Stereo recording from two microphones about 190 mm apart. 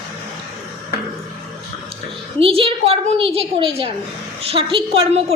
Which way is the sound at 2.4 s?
30° right (ahead or behind).